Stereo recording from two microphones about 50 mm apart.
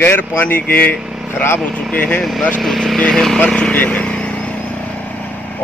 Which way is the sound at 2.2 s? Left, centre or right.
Centre.